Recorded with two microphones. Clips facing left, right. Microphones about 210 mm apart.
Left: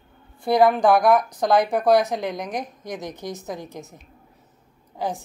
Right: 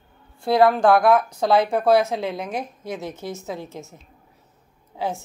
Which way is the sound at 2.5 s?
15° left (ahead or behind).